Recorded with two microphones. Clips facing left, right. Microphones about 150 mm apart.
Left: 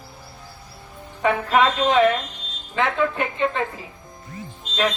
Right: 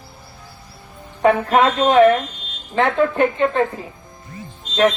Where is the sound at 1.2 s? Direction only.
35° right (ahead or behind).